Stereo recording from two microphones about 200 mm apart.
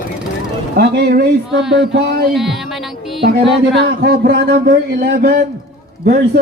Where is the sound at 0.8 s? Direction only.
50° right (ahead or behind).